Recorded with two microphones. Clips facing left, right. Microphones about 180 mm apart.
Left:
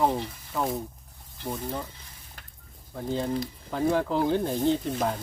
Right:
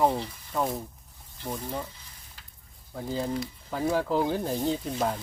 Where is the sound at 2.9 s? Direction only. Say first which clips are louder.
Left 2 dB; centre (ahead or behind).